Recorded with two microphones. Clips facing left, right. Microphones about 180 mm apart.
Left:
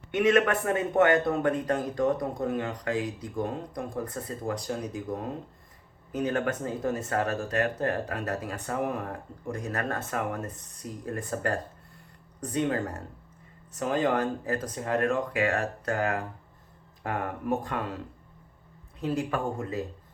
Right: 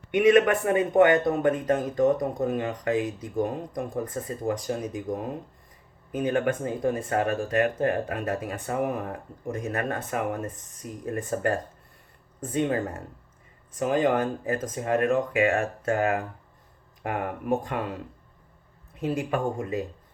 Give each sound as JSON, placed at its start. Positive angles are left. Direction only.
{"t": 0.1, "sound": "speech", "side_deg": -15}
{"t": 18.9, "sound": "speech", "side_deg": -20}